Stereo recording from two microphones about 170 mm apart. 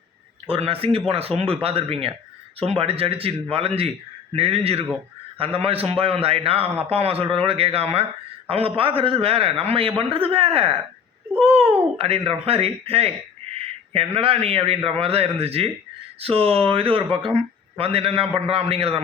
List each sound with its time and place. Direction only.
0.4 s speech: 35° right (ahead or behind)